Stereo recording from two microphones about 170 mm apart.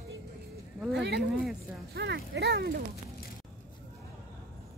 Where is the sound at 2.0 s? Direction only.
75° right (ahead or behind).